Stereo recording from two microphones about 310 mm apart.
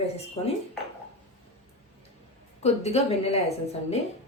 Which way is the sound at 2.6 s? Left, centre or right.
Centre.